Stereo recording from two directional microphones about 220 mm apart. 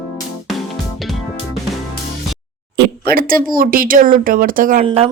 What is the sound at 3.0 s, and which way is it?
Speech, 40° right (ahead or behind).